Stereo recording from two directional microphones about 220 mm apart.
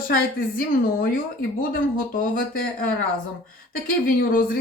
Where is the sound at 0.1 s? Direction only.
40° left (ahead or behind).